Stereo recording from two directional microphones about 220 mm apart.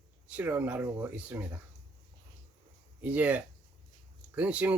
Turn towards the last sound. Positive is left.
turn(degrees=-5)  # may be behind; listen again after turning